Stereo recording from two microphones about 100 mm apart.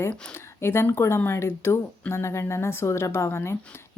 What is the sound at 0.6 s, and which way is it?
Speech, 25° left (ahead or behind).